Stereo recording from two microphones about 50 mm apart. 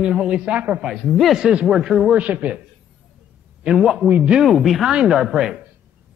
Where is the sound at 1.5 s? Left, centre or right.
Centre.